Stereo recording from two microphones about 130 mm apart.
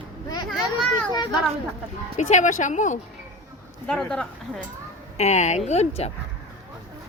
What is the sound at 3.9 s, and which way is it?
Speech, 5° left (ahead or behind).